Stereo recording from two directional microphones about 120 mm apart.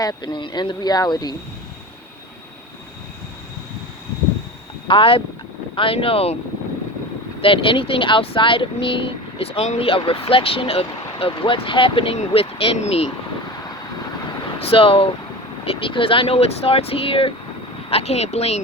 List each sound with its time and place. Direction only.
0.0 s speech: 35° left (ahead or behind)
4.9 s speech: 50° left (ahead or behind)
7.4 s speech: 45° left (ahead or behind)
14.6 s speech: 50° left (ahead or behind)